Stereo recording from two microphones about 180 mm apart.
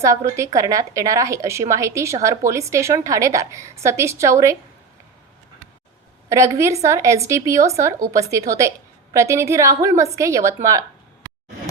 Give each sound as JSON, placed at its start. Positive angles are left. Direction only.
{"t": 0.0, "sound": "a woman's voice", "side_deg": -15}
{"t": 6.2, "sound": "a woman's voice", "side_deg": -15}